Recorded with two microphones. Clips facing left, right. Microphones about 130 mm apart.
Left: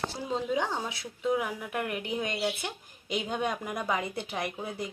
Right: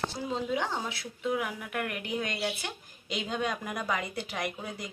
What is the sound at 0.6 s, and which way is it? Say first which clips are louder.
A woman's voice: left 2 dB; 20° left (ahead or behind).